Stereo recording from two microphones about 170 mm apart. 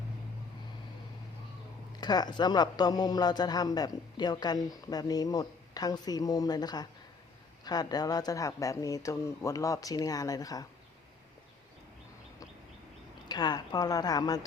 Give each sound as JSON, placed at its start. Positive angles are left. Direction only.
{"t": 2.0, "sound": "speech", "side_deg": 25}
{"t": 13.2, "sound": "speech", "side_deg": 25}